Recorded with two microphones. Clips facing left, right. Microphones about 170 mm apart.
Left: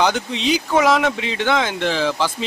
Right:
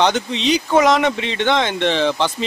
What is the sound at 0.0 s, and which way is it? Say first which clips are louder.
Speech: right 2 dB; 5° left (ahead or behind).